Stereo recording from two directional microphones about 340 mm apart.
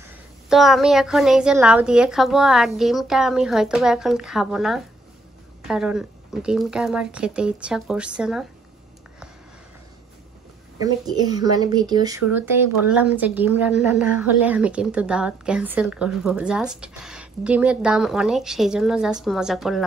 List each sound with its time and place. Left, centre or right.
0.5 s speech: centre
10.8 s speech: centre